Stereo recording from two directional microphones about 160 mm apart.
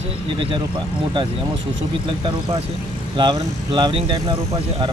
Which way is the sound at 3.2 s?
30° right (ahead or behind).